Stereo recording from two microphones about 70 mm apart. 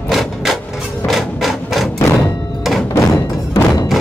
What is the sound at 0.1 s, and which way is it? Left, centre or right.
Wood, centre.